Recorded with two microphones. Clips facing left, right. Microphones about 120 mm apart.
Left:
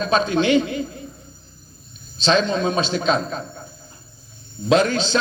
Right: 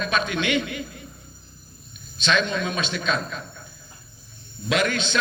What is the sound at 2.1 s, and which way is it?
A man's voice, 35° left (ahead or behind).